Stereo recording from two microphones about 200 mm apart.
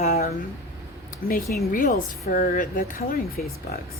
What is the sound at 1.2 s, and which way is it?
A woman's voice, 45° left (ahead or behind).